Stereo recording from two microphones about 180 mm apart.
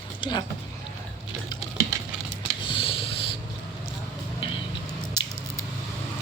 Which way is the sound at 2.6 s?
30° left (ahead or behind).